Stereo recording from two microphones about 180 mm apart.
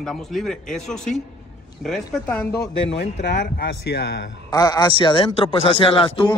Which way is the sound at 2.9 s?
70° left (ahead or behind).